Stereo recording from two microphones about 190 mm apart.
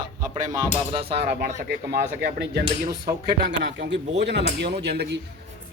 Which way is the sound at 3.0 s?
60° right (ahead or behind).